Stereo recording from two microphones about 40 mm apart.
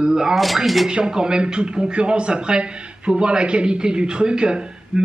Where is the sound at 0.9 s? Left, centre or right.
Right.